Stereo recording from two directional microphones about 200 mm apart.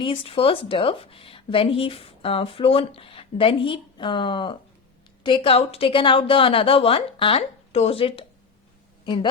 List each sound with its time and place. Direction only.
0.0 s a woman's voice: 25° left (ahead or behind)